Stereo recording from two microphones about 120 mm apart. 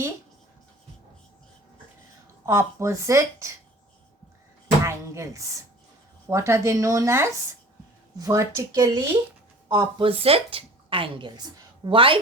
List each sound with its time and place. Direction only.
2.5 s speech: 25° right (ahead or behind)
4.8 s speech: 25° right (ahead or behind)
9.6 s a woman's voice: 45° right (ahead or behind)